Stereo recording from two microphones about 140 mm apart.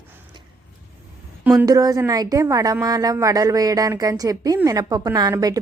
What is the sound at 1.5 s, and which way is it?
Speech, 25° right (ahead or behind).